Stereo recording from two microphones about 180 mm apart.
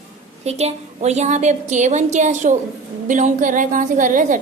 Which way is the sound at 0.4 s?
35° right (ahead or behind).